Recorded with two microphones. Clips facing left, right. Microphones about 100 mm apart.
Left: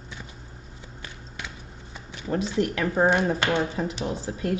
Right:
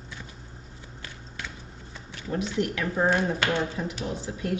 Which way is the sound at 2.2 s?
35° left (ahead or behind).